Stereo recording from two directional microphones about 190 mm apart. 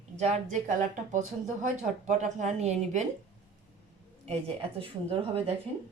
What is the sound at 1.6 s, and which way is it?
Speech, 40° right (ahead or behind).